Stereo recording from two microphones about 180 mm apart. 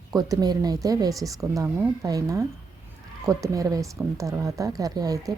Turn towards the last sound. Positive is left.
turn(degrees=-20)  # may be behind; listen again after turning